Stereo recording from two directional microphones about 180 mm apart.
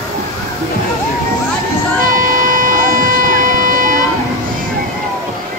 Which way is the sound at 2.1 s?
45° right (ahead or behind).